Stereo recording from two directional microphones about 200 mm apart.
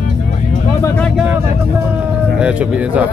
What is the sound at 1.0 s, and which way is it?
Vehicle, 5° right (ahead or behind).